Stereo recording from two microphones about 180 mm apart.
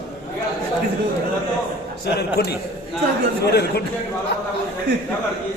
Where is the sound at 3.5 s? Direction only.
60° left (ahead or behind).